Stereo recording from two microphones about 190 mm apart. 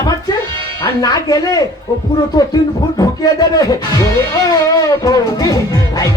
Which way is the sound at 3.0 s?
20° left (ahead or behind).